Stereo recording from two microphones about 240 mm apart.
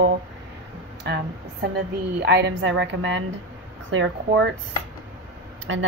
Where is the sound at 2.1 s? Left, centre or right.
Right.